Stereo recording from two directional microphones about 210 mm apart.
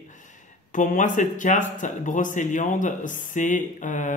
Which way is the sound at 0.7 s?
40° left (ahead or behind).